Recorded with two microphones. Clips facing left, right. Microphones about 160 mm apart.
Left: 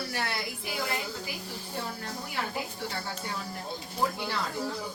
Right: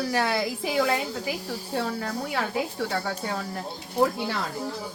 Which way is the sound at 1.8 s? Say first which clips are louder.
Right 8 dB; 75° right (ahead or behind).